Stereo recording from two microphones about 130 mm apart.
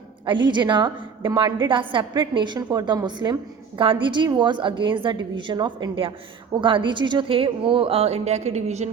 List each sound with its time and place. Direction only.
0.3 s a woman's voice: 35° right (ahead or behind); by 8.9 s 60° right (ahead or behind)